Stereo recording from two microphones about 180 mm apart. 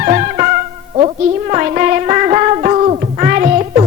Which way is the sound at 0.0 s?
40° right (ahead or behind).